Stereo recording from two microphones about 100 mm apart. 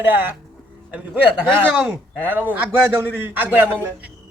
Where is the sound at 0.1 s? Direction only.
20° right (ahead or behind).